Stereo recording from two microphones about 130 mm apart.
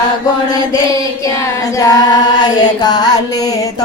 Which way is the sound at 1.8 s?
30° left (ahead or behind).